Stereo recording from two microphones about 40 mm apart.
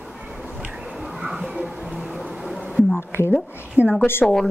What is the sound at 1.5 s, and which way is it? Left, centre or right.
Music, right.